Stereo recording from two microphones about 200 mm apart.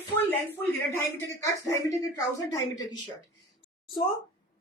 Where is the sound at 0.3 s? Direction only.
10° left (ahead or behind).